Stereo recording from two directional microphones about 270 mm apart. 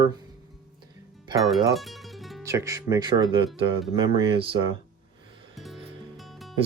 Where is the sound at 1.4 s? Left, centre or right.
Centre.